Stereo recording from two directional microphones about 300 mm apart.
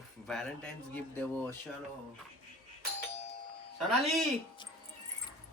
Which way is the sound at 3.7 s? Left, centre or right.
Centre.